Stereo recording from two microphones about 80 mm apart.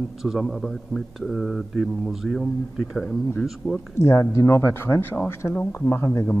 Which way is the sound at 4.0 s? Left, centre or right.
Left.